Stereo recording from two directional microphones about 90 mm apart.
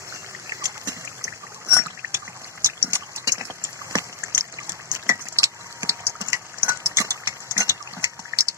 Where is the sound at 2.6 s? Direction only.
35° right (ahead or behind).